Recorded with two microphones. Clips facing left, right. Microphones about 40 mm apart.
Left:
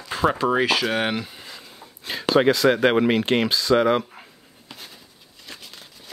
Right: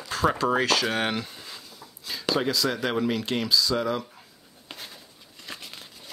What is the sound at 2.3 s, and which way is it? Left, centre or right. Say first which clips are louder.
Speech: left 8 dB; left.